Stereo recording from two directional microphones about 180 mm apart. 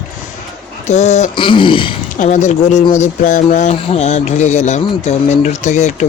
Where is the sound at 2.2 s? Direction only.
40° left (ahead or behind).